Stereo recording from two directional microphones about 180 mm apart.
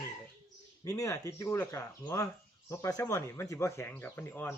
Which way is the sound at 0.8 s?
20° left (ahead or behind).